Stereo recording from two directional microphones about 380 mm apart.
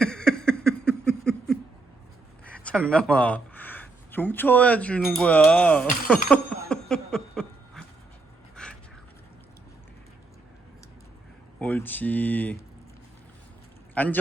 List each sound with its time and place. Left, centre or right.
0.0 s a sound: centre
2.4 s speech: centre
6.2 s a sound: centre
8.6 s pant: centre
11.6 s speech: centre
13.9 s speech: centre